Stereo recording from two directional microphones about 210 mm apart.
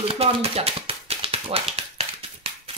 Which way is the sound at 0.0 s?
25° right (ahead or behind).